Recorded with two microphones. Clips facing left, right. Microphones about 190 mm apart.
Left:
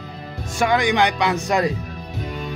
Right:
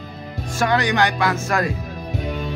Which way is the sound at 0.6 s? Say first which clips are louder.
Left 1 dB; 15° left (ahead or behind).